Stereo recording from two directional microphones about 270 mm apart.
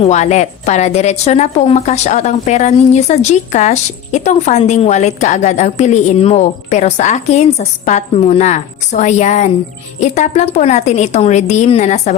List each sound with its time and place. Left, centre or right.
0.0 s a woman's voice: left